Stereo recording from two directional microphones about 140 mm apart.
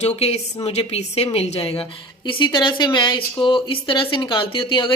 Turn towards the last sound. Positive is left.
turn(degrees=35)  # may be behind; listen again after turning